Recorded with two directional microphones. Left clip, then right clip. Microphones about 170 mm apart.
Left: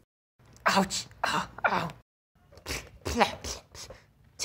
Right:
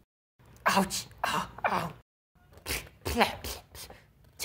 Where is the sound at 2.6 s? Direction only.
20° left (ahead or behind).